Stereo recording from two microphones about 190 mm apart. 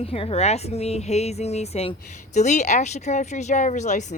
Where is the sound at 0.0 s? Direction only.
30° left (ahead or behind).